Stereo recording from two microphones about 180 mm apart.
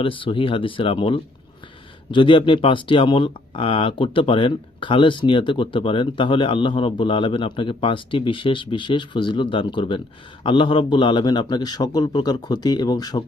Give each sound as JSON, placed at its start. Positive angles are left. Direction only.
{"t": 0.0, "sound": "speech", "side_deg": 30}